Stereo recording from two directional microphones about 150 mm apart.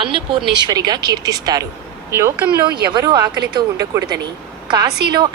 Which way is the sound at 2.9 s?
30° right (ahead or behind).